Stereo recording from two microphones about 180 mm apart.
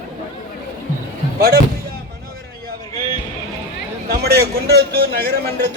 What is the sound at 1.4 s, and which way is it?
Speech, 60° right (ahead or behind).